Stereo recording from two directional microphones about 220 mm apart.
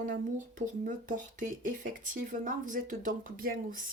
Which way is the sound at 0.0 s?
35° right (ahead or behind).